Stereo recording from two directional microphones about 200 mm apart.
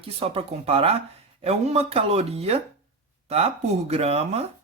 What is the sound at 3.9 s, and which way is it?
Speech, 30° right (ahead or behind).